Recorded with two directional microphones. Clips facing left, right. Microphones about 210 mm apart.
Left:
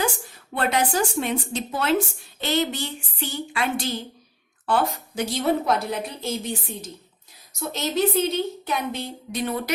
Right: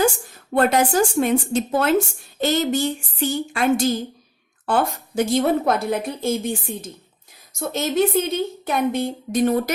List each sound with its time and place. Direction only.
0.5 s a woman's voice: 45° right (ahead or behind)
7.7 s a woman's voice: 50° right (ahead or behind)